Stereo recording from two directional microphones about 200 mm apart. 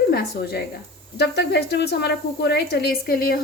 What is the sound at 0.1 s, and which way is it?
Speech, 50° left (ahead or behind).